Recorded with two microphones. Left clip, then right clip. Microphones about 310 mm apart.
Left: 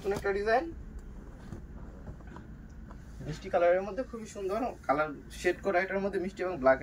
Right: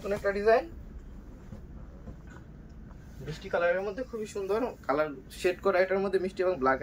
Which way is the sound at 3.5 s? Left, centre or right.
Centre.